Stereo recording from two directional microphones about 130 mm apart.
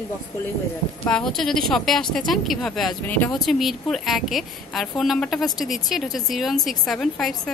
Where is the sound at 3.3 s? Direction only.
Centre (ahead or behind).